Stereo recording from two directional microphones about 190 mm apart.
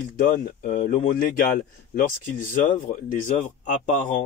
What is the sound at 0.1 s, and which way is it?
Speech, 45° left (ahead or behind).